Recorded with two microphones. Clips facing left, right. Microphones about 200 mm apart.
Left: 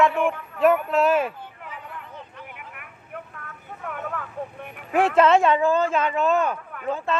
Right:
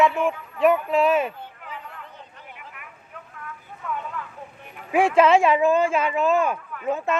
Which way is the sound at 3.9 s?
55° left (ahead or behind).